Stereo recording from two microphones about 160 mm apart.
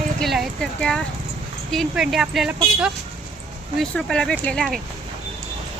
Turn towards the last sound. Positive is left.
turn(degrees=5)  # may be behind; listen again after turning